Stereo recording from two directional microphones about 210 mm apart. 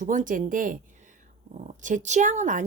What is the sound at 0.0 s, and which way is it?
Speech, 35° right (ahead or behind).